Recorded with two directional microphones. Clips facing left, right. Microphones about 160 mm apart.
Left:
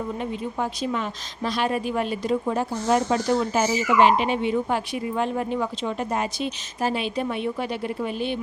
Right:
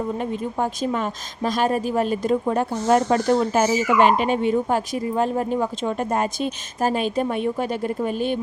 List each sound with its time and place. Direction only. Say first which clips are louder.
0.2 s a woman's voice: right 3 dB; 45° right (ahead or behind)